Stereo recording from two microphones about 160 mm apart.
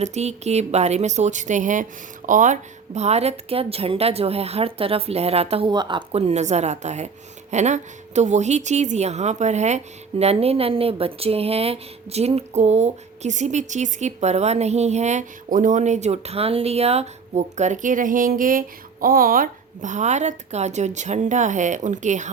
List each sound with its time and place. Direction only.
0.0 s a woman's voice: 45° right (ahead or behind)